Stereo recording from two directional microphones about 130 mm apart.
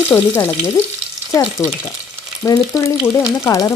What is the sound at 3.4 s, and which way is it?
Speech, 25° left (ahead or behind).